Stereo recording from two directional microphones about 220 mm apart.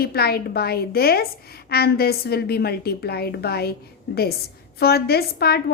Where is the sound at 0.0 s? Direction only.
45° left (ahead or behind).